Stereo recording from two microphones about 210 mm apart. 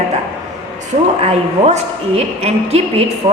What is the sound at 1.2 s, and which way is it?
A woman's voice, 30° right (ahead or behind).